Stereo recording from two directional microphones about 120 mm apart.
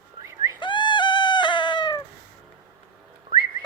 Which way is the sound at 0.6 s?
40° left (ahead or behind).